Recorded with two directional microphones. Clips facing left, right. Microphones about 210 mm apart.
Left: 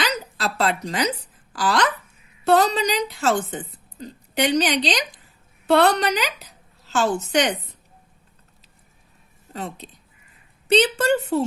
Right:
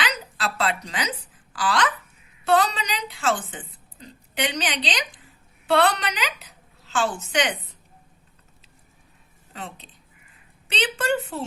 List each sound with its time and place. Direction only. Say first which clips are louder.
0.0 s a sound: left 3 dB; 40° left (ahead or behind)
1.5 s a woman's voice: left 3 dB; 40° left (ahead or behind)
9.5 s a woman's voice: left 6 dB; 40° left (ahead or behind)